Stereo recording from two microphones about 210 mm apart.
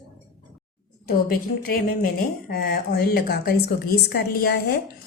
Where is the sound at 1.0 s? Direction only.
45° left (ahead or behind).